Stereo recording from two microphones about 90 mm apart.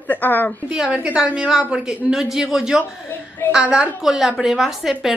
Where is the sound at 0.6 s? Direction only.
5° right (ahead or behind).